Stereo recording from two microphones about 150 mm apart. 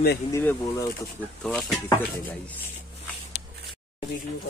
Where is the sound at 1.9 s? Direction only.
15° left (ahead or behind).